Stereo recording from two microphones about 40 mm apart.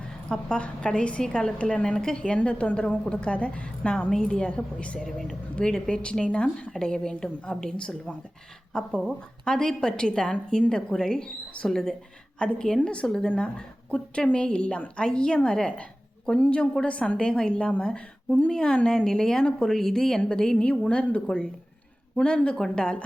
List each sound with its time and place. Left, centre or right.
0.3 s a woman's voice: left
4.9 s speech: centre
5.5 s a woman's voice: centre
6.7 s speech: centre
7.8 s a woman's voice: left
13.3 s a woman's voice: left
18.9 s speech: centre
20.6 s a woman's voice: left
21.2 s a woman's voice: left
22.7 s a woman's voice: left